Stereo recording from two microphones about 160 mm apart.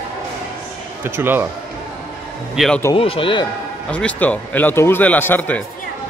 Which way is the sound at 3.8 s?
10° left (ahead or behind).